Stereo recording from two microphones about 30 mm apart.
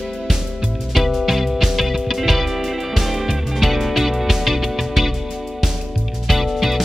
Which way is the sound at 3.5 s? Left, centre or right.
Centre.